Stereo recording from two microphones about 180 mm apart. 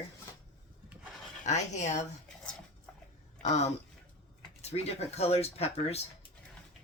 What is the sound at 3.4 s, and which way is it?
Speech, 40° left (ahead or behind).